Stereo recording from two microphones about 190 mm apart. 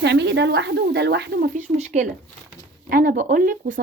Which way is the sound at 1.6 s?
40° right (ahead or behind).